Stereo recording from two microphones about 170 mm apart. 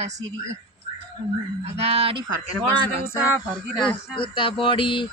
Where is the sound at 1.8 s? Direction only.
35° right (ahead or behind).